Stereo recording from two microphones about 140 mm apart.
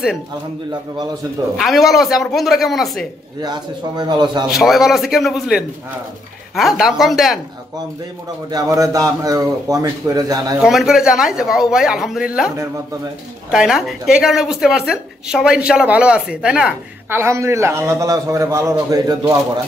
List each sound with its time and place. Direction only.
1.6 s speech: centre (ahead or behind)
3.3 s speech: 30° right (ahead or behind)
4.5 s speech: centre (ahead or behind)
8.5 s a man's voice: 25° right (ahead or behind)
10.6 s speech: 5° right (ahead or behind)
17.2 s a man's voice: 20° right (ahead or behind)